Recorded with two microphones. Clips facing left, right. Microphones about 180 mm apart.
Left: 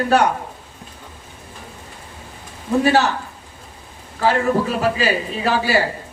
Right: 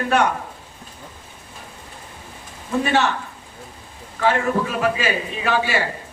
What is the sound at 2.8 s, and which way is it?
Speech, 35° left (ahead or behind).